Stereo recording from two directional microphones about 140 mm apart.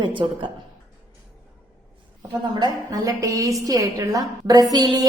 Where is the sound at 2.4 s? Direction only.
30° right (ahead or behind).